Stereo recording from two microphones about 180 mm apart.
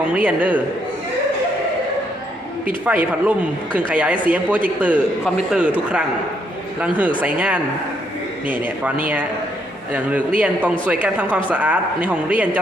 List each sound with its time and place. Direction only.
0.1 s speech: 10° right (ahead or behind)
2.6 s speech: 10° right (ahead or behind)
7.2 s speech: 5° right (ahead or behind)
9.9 s speech: 10° right (ahead or behind)